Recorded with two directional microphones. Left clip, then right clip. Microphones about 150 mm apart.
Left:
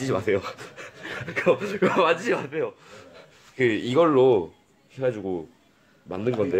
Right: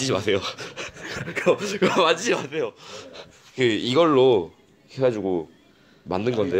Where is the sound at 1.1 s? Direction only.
45° right (ahead or behind).